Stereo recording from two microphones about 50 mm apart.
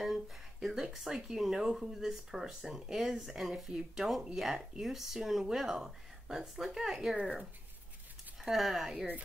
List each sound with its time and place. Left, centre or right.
0.0 s speech: centre
7.2 s speech: right
8.5 s speech: centre